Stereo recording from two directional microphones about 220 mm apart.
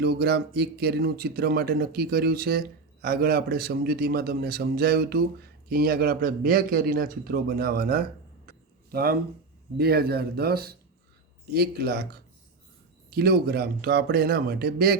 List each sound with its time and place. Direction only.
0.0 s speech: 45° right (ahead or behind)
8.4 s a sound: 45° right (ahead or behind)
9.7 s speech: 45° right (ahead or behind)
13.1 s speech: 45° right (ahead or behind)